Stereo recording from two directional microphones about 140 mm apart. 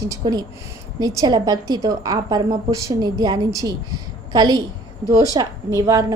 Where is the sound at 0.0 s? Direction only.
25° right (ahead or behind).